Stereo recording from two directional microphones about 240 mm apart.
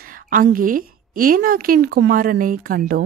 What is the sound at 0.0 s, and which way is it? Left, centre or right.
A woman's voice, right.